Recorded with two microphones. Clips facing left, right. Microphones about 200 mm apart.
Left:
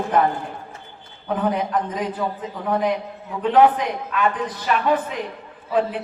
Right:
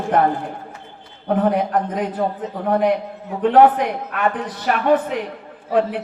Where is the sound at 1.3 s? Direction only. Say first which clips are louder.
Right 4 dB; 55° right (ahead or behind).